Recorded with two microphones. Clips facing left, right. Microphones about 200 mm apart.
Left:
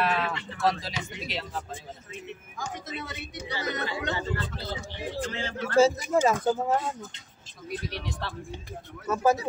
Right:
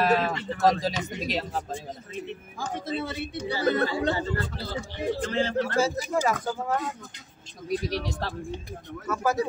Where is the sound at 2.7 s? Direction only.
30° right (ahead or behind).